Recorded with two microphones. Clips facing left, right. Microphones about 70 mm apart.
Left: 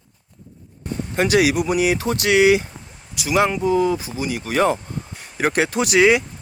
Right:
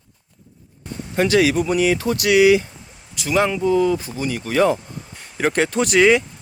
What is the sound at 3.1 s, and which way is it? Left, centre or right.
Speech, centre.